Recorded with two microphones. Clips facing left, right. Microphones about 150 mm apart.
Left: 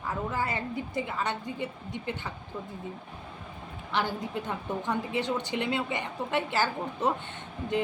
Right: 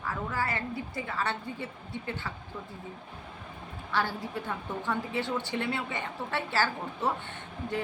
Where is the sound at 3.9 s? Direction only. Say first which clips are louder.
Left 1 dB; 20° left (ahead or behind).